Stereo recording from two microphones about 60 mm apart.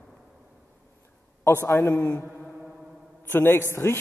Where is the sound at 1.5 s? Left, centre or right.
Left.